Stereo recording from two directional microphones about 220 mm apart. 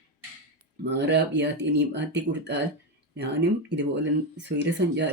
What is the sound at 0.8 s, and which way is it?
Speech, 50° right (ahead or behind).